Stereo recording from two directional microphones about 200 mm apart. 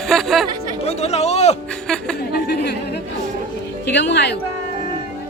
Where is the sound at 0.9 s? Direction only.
30° left (ahead or behind).